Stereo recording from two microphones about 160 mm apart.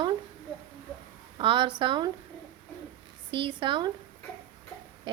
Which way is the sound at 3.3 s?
30° right (ahead or behind).